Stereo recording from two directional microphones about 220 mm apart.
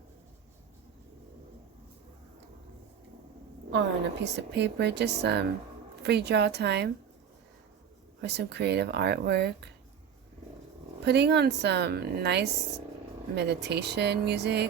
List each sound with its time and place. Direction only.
3.7 s a woman's voice: 50° right (ahead or behind)
8.2 s a woman's voice: 50° right (ahead or behind)
11.0 s a woman's voice: 50° right (ahead or behind)